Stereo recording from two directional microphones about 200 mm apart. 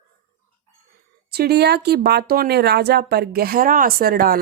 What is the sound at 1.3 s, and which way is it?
Speech, 55° right (ahead or behind).